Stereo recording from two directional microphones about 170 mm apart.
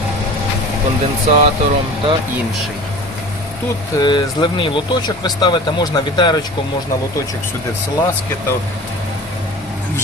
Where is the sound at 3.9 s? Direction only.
25° left (ahead or behind).